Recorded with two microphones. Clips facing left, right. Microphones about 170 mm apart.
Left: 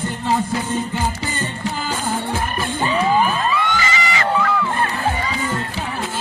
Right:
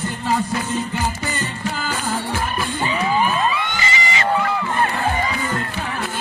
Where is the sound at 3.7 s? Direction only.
20° right (ahead or behind).